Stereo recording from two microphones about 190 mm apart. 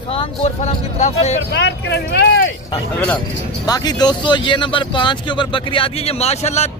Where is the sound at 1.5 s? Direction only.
60° left (ahead or behind).